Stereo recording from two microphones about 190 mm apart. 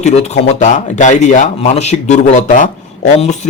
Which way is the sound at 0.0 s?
35° left (ahead or behind).